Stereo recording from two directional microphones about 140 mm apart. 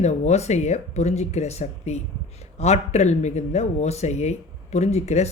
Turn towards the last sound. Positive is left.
turn(degrees=50)  # may be behind; listen again after turning